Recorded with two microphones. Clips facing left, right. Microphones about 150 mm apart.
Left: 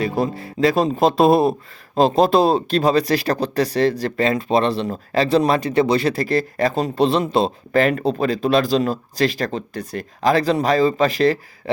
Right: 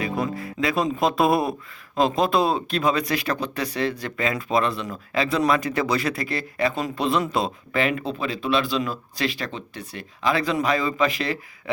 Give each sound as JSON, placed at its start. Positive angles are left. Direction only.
{"t": 0.0, "sound": "speech", "side_deg": 30}